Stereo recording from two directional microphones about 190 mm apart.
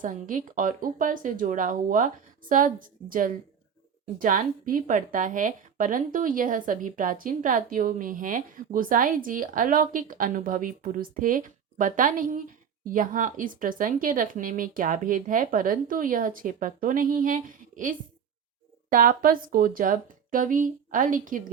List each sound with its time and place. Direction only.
0.0 s a woman's voice: 45° right (ahead or behind)